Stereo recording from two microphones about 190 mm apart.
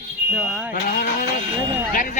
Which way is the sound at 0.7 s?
45° left (ahead or behind).